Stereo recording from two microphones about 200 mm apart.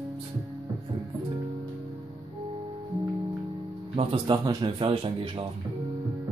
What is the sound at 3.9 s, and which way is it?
A man's voice, 30° right (ahead or behind).